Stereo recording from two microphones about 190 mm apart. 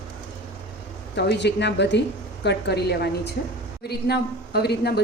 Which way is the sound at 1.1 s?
65° left (ahead or behind).